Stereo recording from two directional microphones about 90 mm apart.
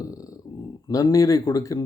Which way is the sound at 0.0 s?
40° left (ahead or behind).